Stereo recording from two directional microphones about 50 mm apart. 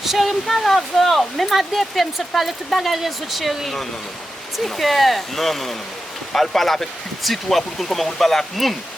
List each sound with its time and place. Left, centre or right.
0.0 s speech: centre